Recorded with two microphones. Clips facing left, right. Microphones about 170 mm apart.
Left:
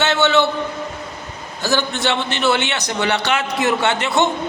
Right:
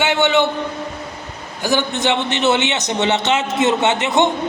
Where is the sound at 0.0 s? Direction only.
15° right (ahead or behind).